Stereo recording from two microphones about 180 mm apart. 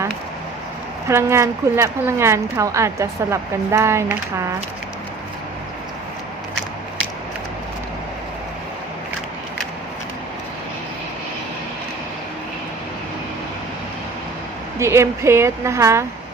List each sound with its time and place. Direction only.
1.0 s a woman's voice: 15° right (ahead or behind)
14.8 s a woman's voice: 15° right (ahead or behind)